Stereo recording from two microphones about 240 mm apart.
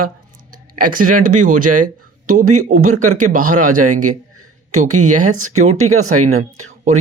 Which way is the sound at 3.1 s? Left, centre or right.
Right.